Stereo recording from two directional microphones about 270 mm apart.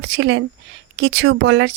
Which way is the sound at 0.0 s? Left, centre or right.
Right.